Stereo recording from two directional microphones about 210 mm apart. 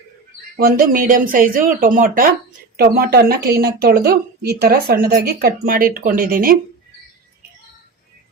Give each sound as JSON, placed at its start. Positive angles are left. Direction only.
{"t": 0.5, "sound": "a woman's voice", "side_deg": -45}